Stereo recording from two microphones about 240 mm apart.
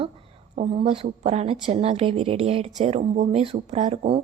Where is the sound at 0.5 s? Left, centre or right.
Right.